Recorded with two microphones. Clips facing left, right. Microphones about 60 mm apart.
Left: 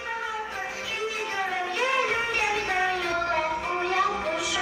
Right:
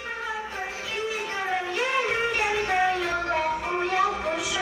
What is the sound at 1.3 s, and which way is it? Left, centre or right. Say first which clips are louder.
Music: even; centre.